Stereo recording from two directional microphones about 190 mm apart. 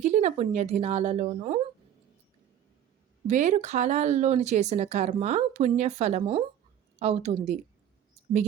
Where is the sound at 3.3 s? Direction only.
40° right (ahead or behind).